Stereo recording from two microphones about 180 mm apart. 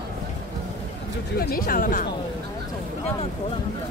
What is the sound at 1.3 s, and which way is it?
Speech, 55° left (ahead or behind).